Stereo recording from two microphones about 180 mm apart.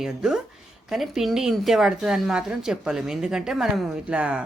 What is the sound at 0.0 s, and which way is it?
A woman's voice, 5° right (ahead or behind).